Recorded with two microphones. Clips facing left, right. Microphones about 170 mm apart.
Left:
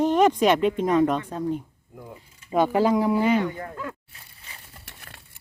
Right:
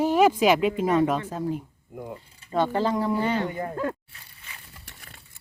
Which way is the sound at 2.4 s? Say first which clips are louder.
Left 4 dB; 10° left (ahead or behind).